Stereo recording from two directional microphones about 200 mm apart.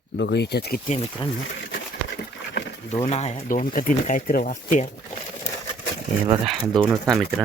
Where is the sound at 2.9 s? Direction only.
35° left (ahead or behind).